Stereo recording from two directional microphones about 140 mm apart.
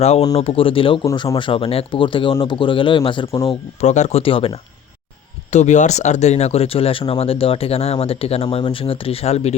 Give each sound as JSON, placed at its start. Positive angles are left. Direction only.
{"t": 0.3, "sound": "speech", "side_deg": 40}
{"t": 3.4, "sound": "speech", "side_deg": 45}
{"t": 5.5, "sound": "speech", "side_deg": 55}